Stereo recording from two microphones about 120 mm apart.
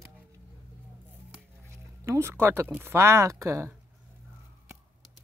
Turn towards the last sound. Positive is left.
turn(degrees=-25)  # may be behind; listen again after turning